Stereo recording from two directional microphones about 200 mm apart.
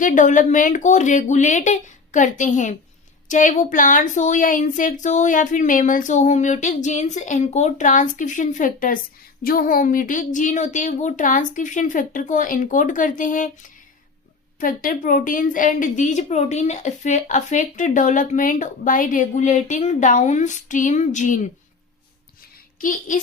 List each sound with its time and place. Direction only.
0.0 s a woman's voice: 40° left (ahead or behind)
22.8 s a woman's voice: 40° left (ahead or behind)